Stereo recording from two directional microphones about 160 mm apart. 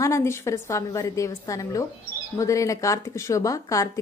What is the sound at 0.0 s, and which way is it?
Speech, 15° left (ahead or behind).